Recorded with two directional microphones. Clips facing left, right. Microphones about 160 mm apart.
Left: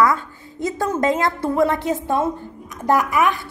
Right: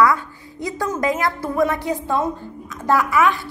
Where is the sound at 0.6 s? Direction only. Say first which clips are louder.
Left 2 dB; 25° left (ahead or behind).